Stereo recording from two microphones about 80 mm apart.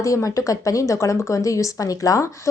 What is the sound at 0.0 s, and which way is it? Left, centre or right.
A woman's voice, left.